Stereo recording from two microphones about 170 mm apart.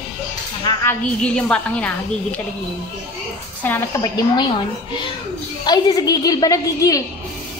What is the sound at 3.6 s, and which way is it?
Speech, 10° left (ahead or behind).